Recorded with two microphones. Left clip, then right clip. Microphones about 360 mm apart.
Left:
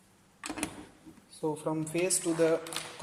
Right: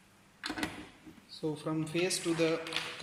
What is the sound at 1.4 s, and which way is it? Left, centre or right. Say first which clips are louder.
A man's voice: left 3 dB; left.